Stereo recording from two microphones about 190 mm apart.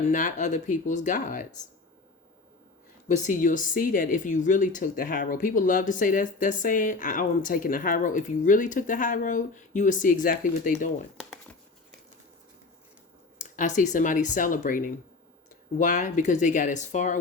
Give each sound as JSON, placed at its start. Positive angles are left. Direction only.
{"t": 0.1, "sound": "speech", "side_deg": 40}
{"t": 3.2, "sound": "speech", "side_deg": 45}
{"t": 13.4, "sound": "speech", "side_deg": 40}